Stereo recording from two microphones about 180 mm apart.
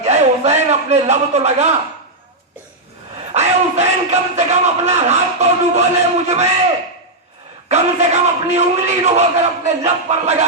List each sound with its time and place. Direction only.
0.0 s a sound: 35° right (ahead or behind)
3.3 s a man's voice: 40° right (ahead or behind)
7.7 s a man's voice: 40° right (ahead or behind)